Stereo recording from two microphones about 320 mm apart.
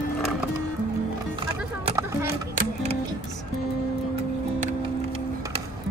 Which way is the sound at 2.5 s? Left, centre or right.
Right.